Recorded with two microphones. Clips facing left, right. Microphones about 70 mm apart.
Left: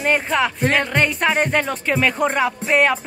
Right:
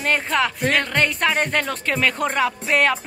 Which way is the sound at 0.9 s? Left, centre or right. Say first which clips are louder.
Left 2 dB; centre.